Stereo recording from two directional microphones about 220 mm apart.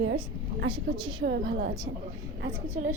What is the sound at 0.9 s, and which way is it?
Speech, 20° right (ahead or behind).